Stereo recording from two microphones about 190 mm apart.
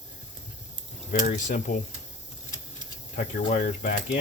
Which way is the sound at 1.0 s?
40° left (ahead or behind).